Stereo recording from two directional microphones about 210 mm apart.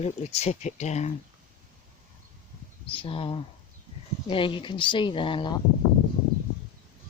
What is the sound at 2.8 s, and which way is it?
Speech, 25° left (ahead or behind).